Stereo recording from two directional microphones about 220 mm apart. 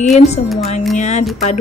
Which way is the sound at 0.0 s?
30° left (ahead or behind).